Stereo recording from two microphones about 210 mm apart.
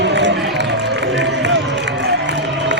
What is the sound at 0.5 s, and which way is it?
Run, 55° right (ahead or behind).